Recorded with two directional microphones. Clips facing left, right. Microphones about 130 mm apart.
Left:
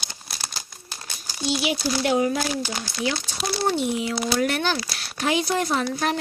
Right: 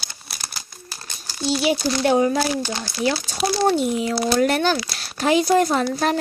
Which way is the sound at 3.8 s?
40° right (ahead or behind).